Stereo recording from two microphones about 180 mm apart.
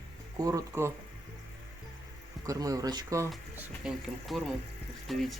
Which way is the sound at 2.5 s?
20° right (ahead or behind).